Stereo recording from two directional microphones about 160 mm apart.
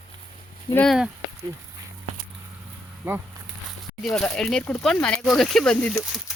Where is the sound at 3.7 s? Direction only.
Centre (ahead or behind).